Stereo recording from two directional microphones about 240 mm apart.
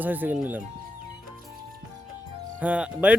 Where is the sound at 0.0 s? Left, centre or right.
Centre.